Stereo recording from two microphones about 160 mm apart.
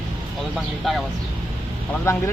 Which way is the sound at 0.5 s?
Centre (ahead or behind).